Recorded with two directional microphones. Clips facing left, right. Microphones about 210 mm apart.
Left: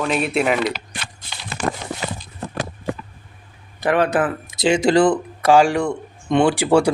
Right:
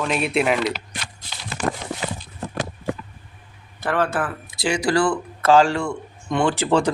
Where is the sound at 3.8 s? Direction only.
15° left (ahead or behind).